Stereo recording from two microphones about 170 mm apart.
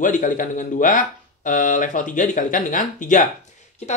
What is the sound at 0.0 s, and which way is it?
Speech, 50° left (ahead or behind).